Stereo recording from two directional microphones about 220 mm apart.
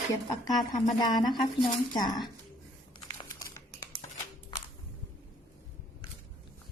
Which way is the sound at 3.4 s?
15° left (ahead or behind).